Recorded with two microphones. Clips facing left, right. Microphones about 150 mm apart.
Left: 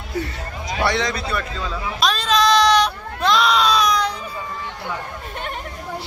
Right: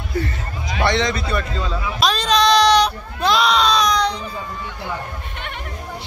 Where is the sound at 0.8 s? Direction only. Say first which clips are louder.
Right 3 dB; 5° left (ahead or behind).